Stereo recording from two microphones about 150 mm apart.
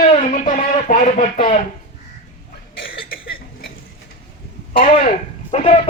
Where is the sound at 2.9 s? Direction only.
75° left (ahead or behind).